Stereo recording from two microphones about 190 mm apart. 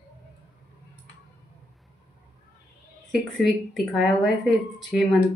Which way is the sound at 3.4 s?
Centre (ahead or behind).